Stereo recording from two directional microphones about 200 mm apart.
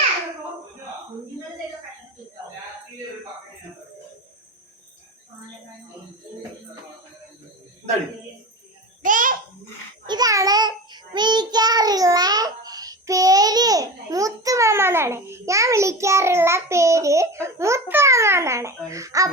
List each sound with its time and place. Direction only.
9.0 s babbling: 40° right (ahead or behind)
10.1 s child singing: 20° right (ahead or behind)